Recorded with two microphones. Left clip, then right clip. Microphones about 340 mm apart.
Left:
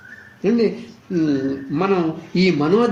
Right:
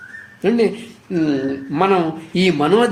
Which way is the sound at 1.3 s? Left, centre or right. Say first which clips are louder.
Right 1 dB; right.